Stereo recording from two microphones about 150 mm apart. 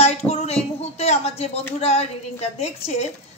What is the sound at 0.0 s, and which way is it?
A woman's voice, 40° left (ahead or behind).